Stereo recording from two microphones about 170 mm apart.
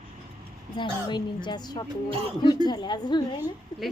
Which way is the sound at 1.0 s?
25° left (ahead or behind).